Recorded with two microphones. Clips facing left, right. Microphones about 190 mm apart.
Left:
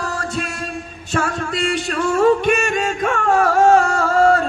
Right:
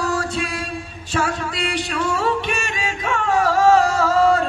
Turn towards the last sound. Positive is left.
turn(degrees=55)  # may be behind; listen again after turning